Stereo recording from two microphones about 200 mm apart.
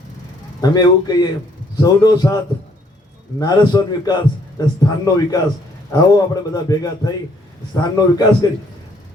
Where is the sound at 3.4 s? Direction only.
20° left (ahead or behind).